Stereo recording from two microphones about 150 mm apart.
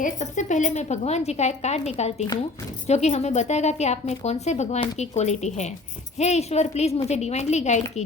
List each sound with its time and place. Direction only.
0.0 s a woman's voice: 55° left (ahead or behind)